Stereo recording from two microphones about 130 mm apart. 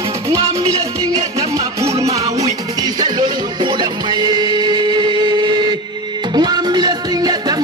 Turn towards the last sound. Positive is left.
turn(degrees=-30)  # may be behind; listen again after turning